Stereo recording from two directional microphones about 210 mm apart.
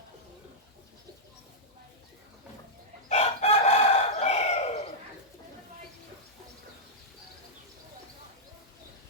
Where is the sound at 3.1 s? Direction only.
30° left (ahead or behind).